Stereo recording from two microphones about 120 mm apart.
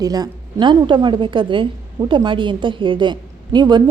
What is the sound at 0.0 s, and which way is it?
A woman's voice, 30° right (ahead or behind).